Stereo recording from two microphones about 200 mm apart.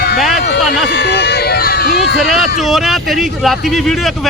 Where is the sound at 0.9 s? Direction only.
55° left (ahead or behind).